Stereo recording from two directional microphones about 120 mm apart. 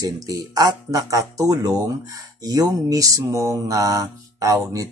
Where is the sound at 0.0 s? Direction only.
30° right (ahead or behind).